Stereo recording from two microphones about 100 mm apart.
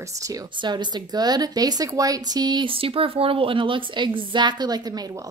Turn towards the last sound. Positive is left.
turn(degrees=-45)  # may be behind; listen again after turning